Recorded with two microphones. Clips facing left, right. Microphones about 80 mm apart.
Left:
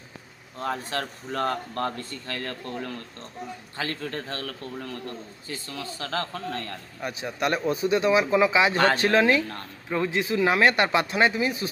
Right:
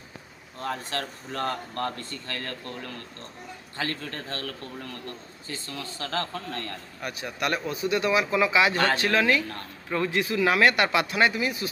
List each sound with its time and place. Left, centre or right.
0.6 s speech: centre
7.0 s a man's voice: left
9.5 s a man's voice: centre